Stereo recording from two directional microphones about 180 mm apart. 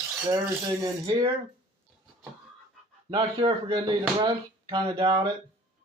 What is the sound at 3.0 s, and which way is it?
Speech, 25° right (ahead or behind).